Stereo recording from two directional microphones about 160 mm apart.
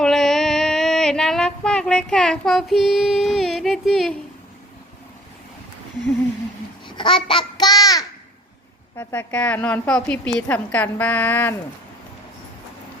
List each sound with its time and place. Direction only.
0.0 s a sound: centre (ahead or behind)
6.8 s babbling: 30° left (ahead or behind)
9.0 s a woman's voice: 10° left (ahead or behind)